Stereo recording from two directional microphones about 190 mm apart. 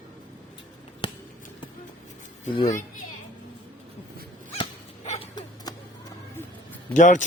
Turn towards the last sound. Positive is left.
turn(degrees=40)  # may be behind; listen again after turning